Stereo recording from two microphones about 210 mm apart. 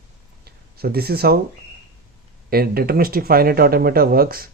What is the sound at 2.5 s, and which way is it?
Speech, 45° right (ahead or behind).